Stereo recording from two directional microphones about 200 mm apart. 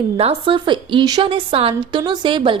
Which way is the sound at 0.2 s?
30° right (ahead or behind).